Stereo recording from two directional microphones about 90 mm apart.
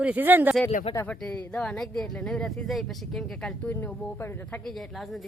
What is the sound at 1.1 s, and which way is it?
Speech, 10° left (ahead or behind).